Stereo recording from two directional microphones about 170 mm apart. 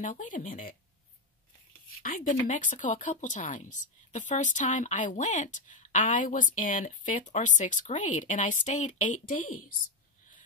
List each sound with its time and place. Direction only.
0.0 s a woman's voice: 50° left (ahead or behind)
2.0 s a woman's voice: 55° left (ahead or behind)